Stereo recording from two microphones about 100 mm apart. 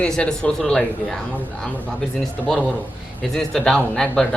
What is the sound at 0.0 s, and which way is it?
Speech, 10° left (ahead or behind).